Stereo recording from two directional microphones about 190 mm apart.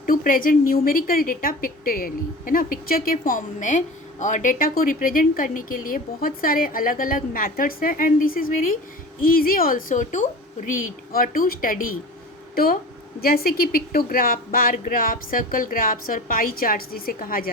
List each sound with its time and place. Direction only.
0.0 s a woman's voice: 45° left (ahead or behind)